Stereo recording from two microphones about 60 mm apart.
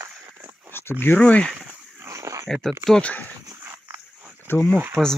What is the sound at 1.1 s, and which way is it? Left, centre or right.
Speech, left.